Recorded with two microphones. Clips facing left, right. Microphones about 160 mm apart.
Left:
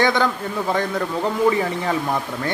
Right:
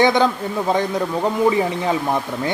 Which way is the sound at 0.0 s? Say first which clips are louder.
Right 3 dB; 20° right (ahead or behind).